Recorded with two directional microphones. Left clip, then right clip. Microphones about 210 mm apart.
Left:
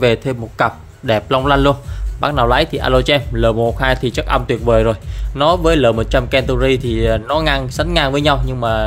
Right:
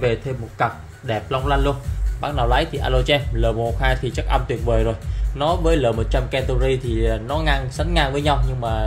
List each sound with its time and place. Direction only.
0.0 s a man's voice: 55° left (ahead or behind)